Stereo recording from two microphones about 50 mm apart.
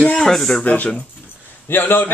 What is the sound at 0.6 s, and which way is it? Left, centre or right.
Speech, left.